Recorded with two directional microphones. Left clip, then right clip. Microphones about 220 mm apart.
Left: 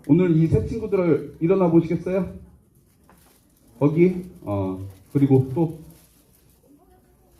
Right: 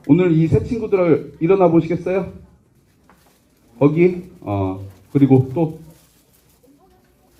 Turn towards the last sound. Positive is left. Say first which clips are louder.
# right 4 dB
turn(degrees=-50)  # may be behind; listen again after turning